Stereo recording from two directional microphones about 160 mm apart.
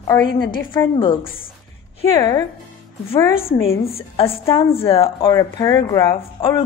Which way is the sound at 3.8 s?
35° left (ahead or behind).